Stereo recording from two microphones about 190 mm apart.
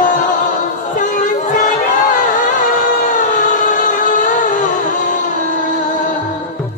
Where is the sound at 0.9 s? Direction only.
45° left (ahead or behind).